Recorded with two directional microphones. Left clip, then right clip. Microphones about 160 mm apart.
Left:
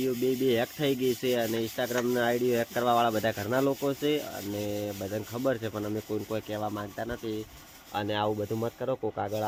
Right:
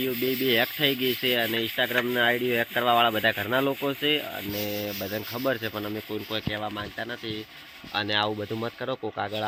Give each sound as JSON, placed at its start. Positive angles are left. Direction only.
{"t": 0.4, "sound": "speech", "side_deg": 0}
{"t": 5.1, "sound": "speech", "side_deg": -20}
{"t": 8.3, "sound": "speech", "side_deg": -15}
{"t": 9.1, "sound": "speech", "side_deg": -5}